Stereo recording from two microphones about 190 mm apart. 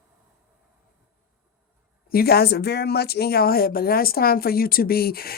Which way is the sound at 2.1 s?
55° left (ahead or behind).